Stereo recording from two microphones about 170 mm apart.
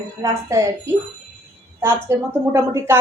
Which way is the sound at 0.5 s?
15° right (ahead or behind).